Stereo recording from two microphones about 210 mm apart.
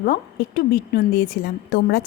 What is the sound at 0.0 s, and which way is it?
A woman's voice, 40° left (ahead or behind).